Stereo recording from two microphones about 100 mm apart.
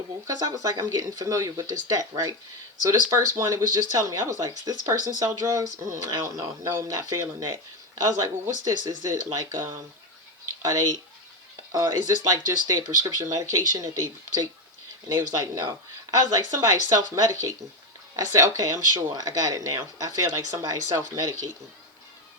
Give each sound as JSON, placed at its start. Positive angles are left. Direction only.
{"t": 0.3, "sound": "speech", "side_deg": -35}